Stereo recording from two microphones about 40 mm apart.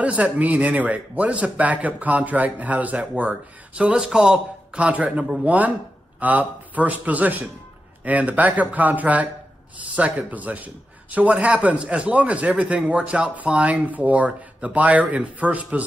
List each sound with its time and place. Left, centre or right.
0.0 s a man's voice: right
3.7 s speech: right
4.7 s a man's voice: right